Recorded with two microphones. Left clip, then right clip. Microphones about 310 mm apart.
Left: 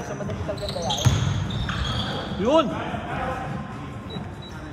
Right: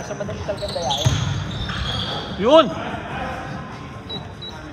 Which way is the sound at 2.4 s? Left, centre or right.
Right.